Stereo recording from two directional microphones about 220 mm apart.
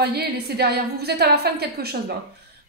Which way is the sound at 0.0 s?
45° right (ahead or behind).